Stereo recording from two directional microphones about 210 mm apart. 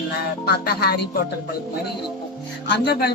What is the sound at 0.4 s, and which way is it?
Speech, 50° left (ahead or behind).